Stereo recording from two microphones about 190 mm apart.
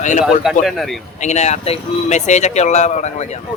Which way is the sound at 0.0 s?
40° left (ahead or behind).